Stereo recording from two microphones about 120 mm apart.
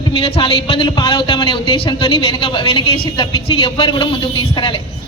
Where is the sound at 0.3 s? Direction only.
50° left (ahead or behind).